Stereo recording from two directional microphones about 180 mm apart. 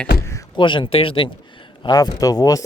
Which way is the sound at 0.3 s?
20° left (ahead or behind).